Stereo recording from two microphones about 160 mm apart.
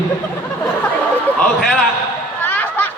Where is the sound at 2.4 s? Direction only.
10° left (ahead or behind).